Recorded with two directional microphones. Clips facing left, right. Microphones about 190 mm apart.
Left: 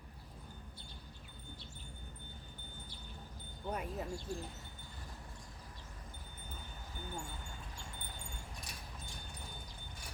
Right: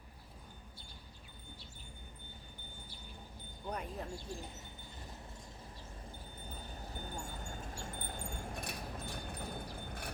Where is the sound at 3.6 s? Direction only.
5° left (ahead or behind).